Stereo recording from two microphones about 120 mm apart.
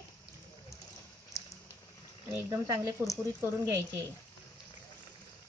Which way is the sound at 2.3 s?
25° right (ahead or behind).